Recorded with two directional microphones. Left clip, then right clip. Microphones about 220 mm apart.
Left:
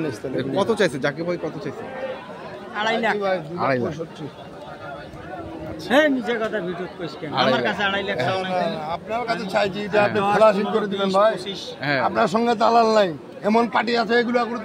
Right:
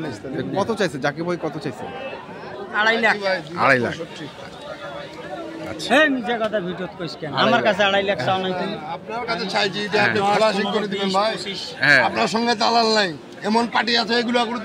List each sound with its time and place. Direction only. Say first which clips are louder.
0.4 s speech: left 2 dB; centre (ahead or behind)
1.2 s speech: right 1 dB; 15° right (ahead or behind)
2.7 s speech: right 4 dB; 10° right (ahead or behind)
3.2 s a man's voice: even; 50° left (ahead or behind)
3.5 s speech: right 9 dB; centre (ahead or behind)
5.9 s speech: right 1 dB; 10° right (ahead or behind)
6.3 s speech: right 2 dB; 25° right (ahead or behind)
7.4 s a man's voice: right 5 dB; 50° right (ahead or behind)
8.4 s a man's voice: left 2 dB; 20° left (ahead or behind)
11.8 s speech: right 7 dB; 5° left (ahead or behind)
12.1 s a man's voice: left 1 dB; 30° left (ahead or behind)